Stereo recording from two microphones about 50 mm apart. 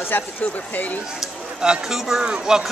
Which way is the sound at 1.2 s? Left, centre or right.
Centre.